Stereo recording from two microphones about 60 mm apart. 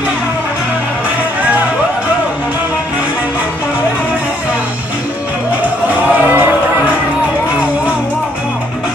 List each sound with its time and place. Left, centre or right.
6.2 s music: right